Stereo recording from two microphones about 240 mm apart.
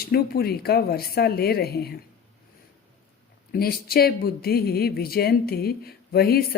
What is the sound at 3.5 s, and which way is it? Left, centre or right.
A woman's voice, left.